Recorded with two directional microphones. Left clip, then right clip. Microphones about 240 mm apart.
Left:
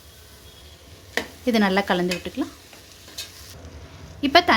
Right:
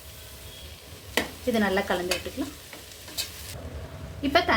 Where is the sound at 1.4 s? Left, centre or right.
Left.